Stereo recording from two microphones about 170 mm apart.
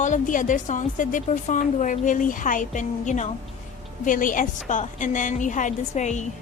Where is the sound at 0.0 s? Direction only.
50° left (ahead or behind).